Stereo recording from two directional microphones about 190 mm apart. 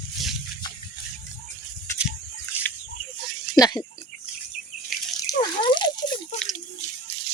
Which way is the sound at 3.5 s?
20° left (ahead or behind).